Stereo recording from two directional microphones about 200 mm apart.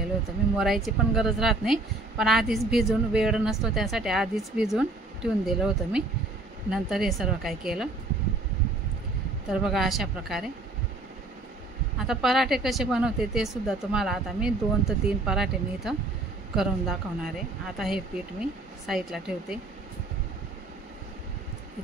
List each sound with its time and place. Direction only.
0.6 s a woman's voice: centre (ahead or behind)
9.5 s a woman's voice: centre (ahead or behind)
12.1 s a woman's voice: centre (ahead or behind)